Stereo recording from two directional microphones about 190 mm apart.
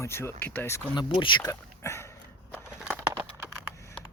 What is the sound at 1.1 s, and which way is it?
Speech, 25° left (ahead or behind).